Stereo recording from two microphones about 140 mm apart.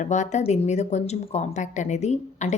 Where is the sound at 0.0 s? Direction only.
60° left (ahead or behind).